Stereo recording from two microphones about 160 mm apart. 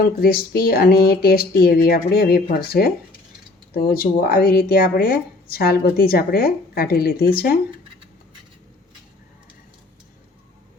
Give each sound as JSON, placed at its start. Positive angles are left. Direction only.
{"t": 0.2, "sound": "speech", "side_deg": 70}